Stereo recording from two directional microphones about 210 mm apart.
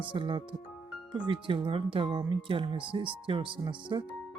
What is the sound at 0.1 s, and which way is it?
Speech, 25° right (ahead or behind).